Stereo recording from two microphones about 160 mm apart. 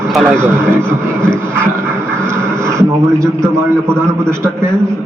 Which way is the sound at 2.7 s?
15° right (ahead or behind).